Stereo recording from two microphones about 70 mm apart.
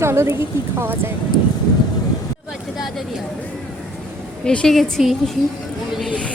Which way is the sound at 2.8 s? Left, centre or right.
Centre.